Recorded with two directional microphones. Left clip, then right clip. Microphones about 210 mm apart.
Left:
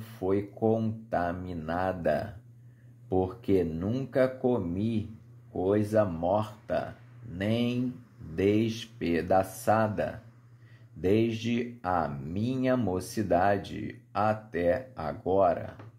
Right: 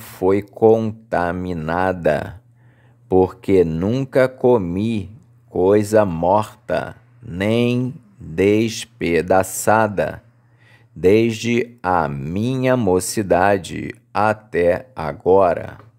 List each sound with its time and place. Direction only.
0.0 s speech: 45° right (ahead or behind)